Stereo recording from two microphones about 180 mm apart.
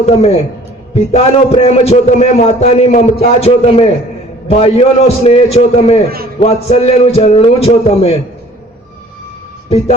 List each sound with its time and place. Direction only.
0.0 s a man's voice: 35° left (ahead or behind)
9.6 s speech: 35° left (ahead or behind)